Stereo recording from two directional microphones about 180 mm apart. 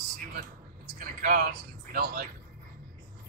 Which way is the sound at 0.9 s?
50° right (ahead or behind).